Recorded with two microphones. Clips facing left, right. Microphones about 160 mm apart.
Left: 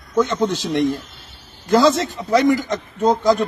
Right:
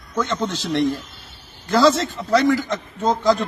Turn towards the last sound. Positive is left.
turn(degrees=10)  # may be behind; listen again after turning